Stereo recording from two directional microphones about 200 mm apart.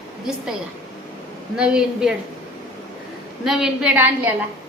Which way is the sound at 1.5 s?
5° right (ahead or behind).